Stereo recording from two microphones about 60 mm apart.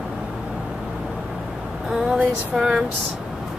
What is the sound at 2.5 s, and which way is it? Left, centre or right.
Speech, centre.